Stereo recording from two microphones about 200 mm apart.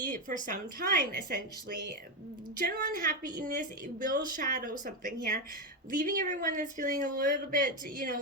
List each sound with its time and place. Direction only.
0.1 s speech: 40° right (ahead or behind)